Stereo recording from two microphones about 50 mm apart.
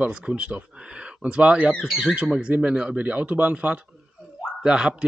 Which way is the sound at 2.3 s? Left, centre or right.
Right.